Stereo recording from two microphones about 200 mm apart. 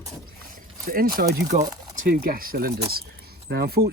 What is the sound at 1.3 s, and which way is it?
Speech, 35° right (ahead or behind).